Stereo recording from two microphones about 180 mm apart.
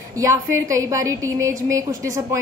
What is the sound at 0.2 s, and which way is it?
A woman's voice, 15° right (ahead or behind).